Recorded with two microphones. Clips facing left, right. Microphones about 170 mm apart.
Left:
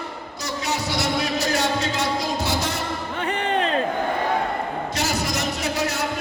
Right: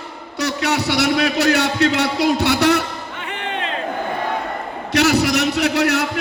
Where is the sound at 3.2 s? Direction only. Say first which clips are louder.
Left 4 dB; 40° left (ahead or behind).